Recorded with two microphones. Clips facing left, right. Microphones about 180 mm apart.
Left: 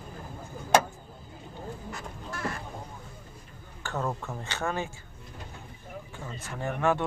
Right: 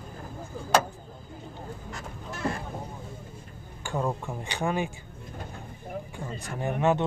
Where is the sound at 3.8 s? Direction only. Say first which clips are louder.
Right 2 dB; 15° right (ahead or behind).